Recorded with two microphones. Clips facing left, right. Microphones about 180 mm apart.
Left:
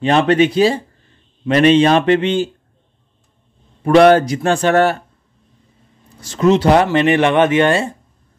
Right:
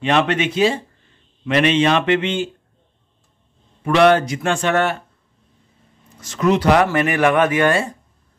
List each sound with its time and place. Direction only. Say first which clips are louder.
0.0 s speech: left 5 dB; 35° left (ahead or behind)
3.8 s speech: left 5 dB; 40° left (ahead or behind)
6.1 s speech: left 4 dB; 30° left (ahead or behind)